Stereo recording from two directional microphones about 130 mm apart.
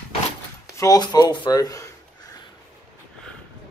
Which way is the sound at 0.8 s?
30° left (ahead or behind).